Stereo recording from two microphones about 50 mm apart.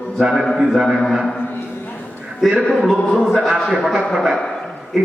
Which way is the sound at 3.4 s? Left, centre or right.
Centre.